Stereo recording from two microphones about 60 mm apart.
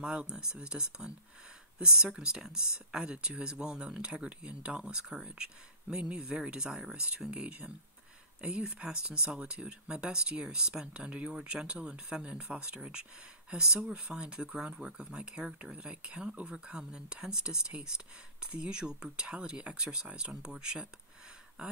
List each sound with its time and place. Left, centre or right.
0.0 s speech: centre